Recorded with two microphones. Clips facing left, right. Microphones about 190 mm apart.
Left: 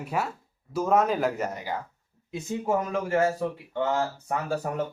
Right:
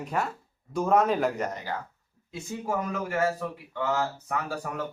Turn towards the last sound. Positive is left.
turn(degrees=30)  # may be behind; listen again after turning